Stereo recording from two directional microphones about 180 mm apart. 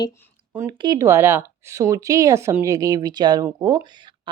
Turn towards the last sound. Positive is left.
turn(degrees=-25)  # may be behind; listen again after turning